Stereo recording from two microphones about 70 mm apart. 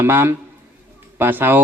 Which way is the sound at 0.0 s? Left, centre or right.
Right.